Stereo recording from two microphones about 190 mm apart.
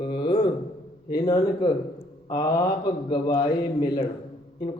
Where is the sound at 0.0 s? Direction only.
25° left (ahead or behind).